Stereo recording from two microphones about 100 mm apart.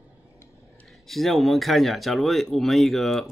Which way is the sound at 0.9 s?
Centre (ahead or behind).